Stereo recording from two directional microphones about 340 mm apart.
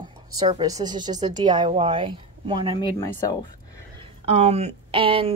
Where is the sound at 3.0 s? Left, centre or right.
Centre.